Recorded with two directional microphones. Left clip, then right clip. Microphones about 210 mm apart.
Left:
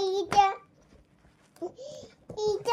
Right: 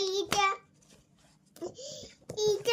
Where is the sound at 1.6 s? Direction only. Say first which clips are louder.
Left 2 dB; 25° right (ahead or behind).